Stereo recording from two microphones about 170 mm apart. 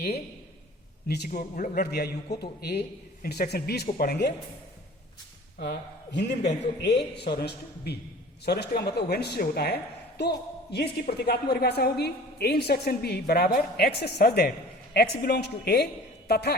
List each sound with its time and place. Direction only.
1.0 s a woman's voice: 70° left (ahead or behind)
1.3 s a woman's voice: 55° left (ahead or behind)
5.5 s a man's voice: 80° left